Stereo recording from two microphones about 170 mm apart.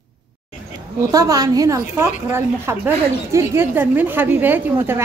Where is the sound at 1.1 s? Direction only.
20° right (ahead or behind).